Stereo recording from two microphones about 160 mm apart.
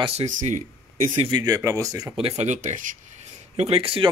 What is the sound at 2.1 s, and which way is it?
Speech, 40° right (ahead or behind).